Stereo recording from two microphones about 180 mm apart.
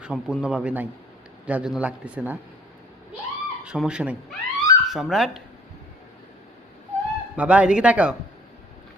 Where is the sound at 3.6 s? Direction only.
5° right (ahead or behind).